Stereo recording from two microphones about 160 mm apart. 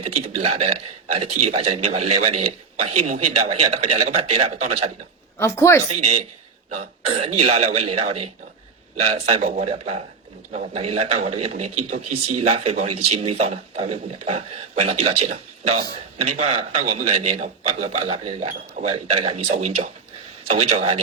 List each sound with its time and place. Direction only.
0.0 s a man's voice: 40° right (ahead or behind)
5.4 s speech: 20° left (ahead or behind)
6.7 s a man's voice: 45° right (ahead or behind)